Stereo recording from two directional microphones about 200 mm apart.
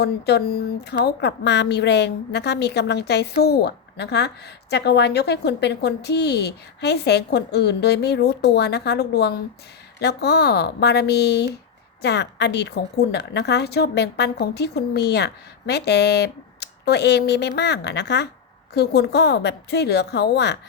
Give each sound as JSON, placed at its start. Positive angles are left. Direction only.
{"t": 0.0, "sound": "speech", "side_deg": 55}